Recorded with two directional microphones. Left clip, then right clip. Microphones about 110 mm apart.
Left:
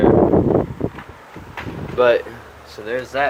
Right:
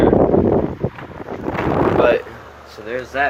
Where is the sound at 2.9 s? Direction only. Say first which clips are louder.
Even; 35° left (ahead or behind).